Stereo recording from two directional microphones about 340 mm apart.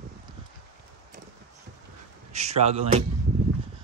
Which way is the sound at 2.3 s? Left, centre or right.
Centre.